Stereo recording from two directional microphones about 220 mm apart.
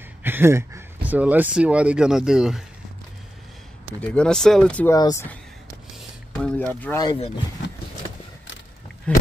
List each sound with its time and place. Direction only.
0.2 s speech: 10° right (ahead or behind)
4.0 s speech: 5° left (ahead or behind)
4.9 s speech: 15° left (ahead or behind)
6.4 s speech: 5° left (ahead or behind)
9.1 s speech: 5° left (ahead or behind)